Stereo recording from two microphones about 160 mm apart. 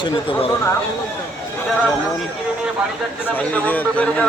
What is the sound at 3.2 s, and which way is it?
A man's voice, 10° left (ahead or behind).